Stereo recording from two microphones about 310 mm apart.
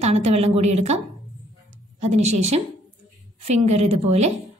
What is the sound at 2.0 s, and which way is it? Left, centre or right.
A woman's voice, right.